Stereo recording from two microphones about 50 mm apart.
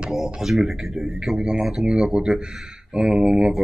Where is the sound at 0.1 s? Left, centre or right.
Centre.